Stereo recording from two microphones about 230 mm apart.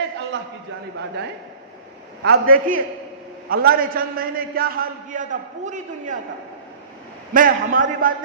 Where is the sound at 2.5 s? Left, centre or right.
Right.